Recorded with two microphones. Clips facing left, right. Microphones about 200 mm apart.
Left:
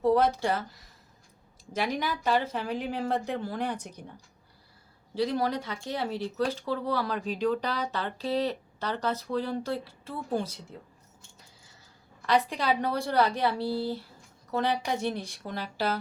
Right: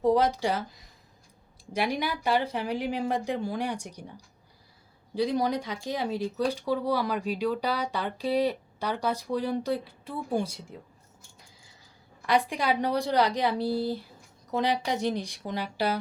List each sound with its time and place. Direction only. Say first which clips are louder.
0.0 s speech: even; 15° right (ahead or behind)
1.7 s speech: right 1 dB; 15° right (ahead or behind)
5.1 s speech: right 1 dB; 15° right (ahead or behind)
12.2 s speech: even; 15° right (ahead or behind)